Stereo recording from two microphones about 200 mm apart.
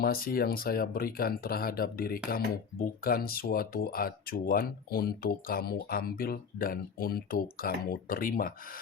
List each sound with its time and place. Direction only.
0.0 s speech: 45° left (ahead or behind)